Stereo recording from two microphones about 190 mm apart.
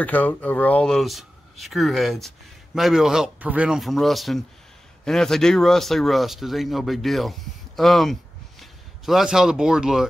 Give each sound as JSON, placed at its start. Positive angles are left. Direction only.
{"t": 0.0, "sound": "speech", "side_deg": 10}